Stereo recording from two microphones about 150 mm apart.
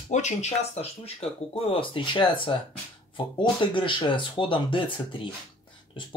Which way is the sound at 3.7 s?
35° left (ahead or behind).